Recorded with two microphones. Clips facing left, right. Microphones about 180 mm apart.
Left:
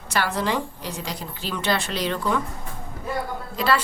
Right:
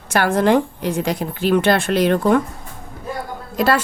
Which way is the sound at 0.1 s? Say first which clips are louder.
Right 9 dB; 50° right (ahead or behind).